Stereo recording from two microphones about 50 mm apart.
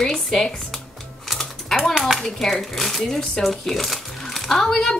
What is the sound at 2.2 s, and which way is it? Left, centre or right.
Speech, centre.